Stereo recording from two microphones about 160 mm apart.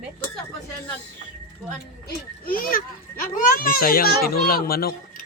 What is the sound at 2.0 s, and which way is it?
A child's voice, 65° left (ahead or behind).